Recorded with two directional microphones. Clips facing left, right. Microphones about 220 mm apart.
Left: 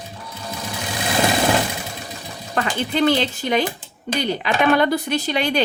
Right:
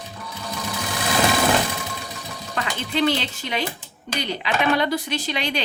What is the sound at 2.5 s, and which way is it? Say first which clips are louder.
Speech: left 4 dB; 50° left (ahead or behind).